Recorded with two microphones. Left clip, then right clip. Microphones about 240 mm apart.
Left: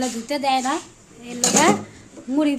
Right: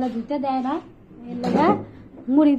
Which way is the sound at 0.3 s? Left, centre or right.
Centre.